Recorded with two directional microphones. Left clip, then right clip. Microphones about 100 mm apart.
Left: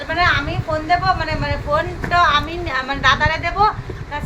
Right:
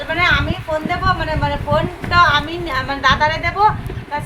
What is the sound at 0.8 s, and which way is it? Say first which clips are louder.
A woman's voice: left 2 dB; 25° right (ahead or behind).